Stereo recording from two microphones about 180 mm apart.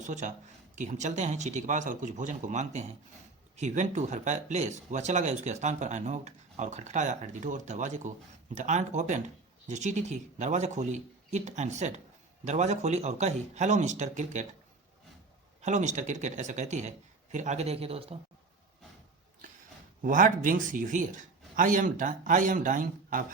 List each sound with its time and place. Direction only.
0.0 s speech: 40° right (ahead or behind)
15.6 s speech: 40° right (ahead or behind)
20.0 s a man's voice: 45° right (ahead or behind)